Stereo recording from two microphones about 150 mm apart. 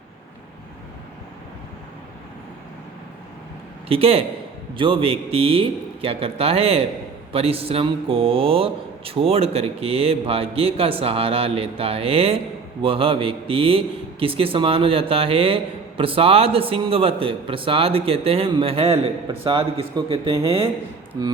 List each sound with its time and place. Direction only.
3.8 s a man's voice: 40° right (ahead or behind)